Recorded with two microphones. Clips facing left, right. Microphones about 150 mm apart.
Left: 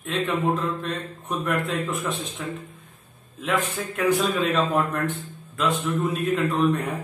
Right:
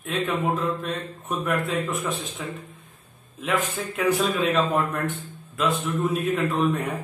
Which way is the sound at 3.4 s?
10° right (ahead or behind).